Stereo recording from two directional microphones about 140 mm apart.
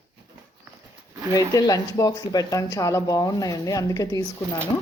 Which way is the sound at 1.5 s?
25° left (ahead or behind).